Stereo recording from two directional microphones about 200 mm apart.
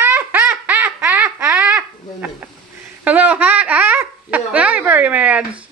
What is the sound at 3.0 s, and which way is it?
Speech, 5° right (ahead or behind).